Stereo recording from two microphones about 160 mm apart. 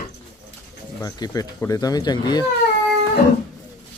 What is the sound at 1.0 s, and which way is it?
Speech, 25° left (ahead or behind).